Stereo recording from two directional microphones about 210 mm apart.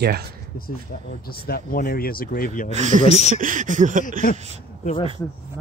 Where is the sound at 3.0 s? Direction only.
30° left (ahead or behind).